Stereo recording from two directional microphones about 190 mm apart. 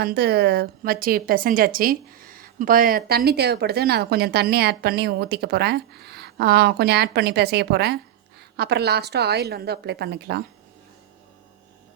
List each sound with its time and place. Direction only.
0.0 s speech: 55° right (ahead or behind)